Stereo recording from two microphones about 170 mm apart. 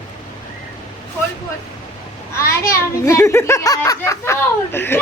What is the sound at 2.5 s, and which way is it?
A child's voice, 15° left (ahead or behind).